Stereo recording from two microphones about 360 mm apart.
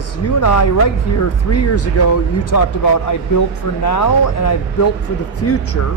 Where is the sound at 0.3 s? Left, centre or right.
Left.